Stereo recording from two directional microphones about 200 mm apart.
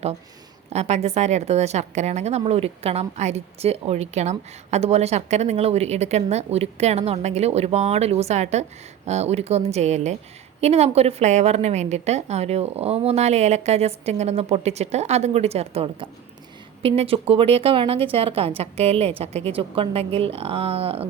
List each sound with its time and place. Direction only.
0.7 s a woman's voice: 35° right (ahead or behind)